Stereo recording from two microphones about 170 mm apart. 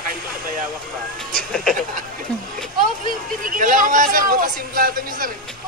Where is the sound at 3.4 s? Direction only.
50° right (ahead or behind).